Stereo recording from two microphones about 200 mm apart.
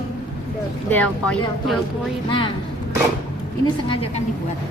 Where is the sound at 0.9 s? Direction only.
5° left (ahead or behind).